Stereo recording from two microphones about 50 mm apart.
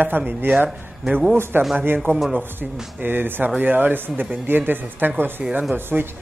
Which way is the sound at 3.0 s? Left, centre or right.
Right.